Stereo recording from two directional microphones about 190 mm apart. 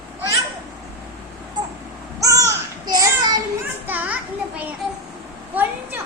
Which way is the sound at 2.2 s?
15° right (ahead or behind).